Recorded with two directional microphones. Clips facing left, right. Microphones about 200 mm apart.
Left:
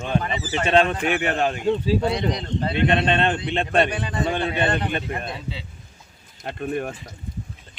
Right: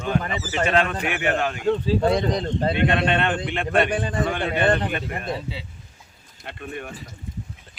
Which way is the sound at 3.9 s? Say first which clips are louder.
Right 3 dB; 45° right (ahead or behind).